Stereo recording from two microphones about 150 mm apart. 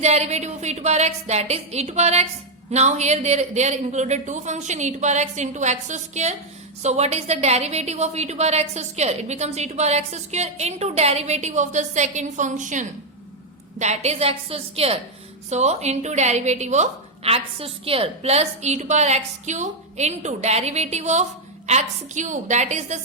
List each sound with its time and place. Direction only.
0.0 s a woman's voice: 45° right (ahead or behind)